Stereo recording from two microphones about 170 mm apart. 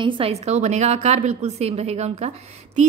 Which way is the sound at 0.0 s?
35° right (ahead or behind).